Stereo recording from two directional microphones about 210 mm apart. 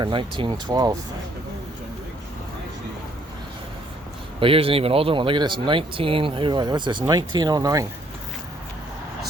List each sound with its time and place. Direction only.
0.0 s speech: 25° right (ahead or behind)
4.4 s speech: 25° right (ahead or behind)